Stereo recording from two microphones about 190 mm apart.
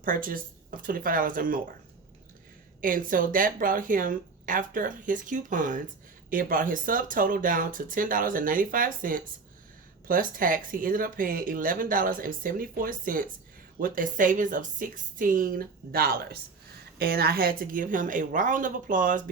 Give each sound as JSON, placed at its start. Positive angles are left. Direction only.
{"t": 0.0, "sound": "speech", "side_deg": -45}
{"t": 2.8, "sound": "speech", "side_deg": -45}